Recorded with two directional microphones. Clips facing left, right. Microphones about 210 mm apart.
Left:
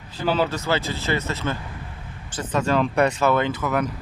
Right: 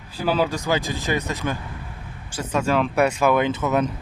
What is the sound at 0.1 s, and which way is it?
Speech, 10° right (ahead or behind).